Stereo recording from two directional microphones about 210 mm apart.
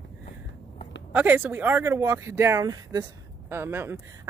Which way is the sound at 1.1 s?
10° right (ahead or behind).